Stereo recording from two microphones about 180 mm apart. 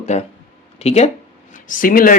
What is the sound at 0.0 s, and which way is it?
Speech, 40° left (ahead or behind).